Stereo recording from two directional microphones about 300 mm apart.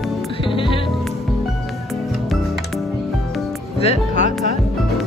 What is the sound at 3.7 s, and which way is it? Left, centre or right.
Music, left.